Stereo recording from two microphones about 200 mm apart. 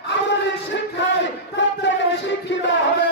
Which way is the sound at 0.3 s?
60° left (ahead or behind).